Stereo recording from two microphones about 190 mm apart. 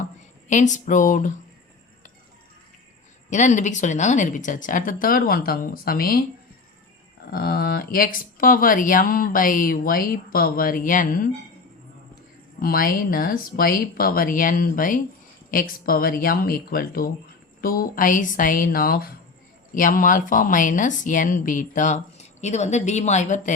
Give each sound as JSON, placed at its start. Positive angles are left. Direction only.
{"t": 0.0, "sound": "speech", "side_deg": 40}
{"t": 3.2, "sound": "speech", "side_deg": 40}
{"t": 7.3, "sound": "speech", "side_deg": 50}
{"t": 12.6, "sound": "speech", "side_deg": 50}